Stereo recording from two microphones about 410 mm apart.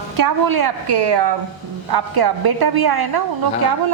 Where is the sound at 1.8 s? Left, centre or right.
Right.